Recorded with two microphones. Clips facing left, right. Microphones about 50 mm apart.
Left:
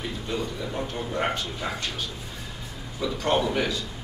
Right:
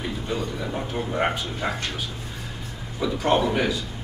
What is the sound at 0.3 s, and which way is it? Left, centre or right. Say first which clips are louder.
A man's voice: right 1 dB; centre.